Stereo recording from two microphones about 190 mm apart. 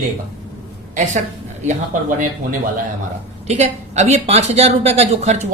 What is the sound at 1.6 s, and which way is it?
Speech, 45° right (ahead or behind).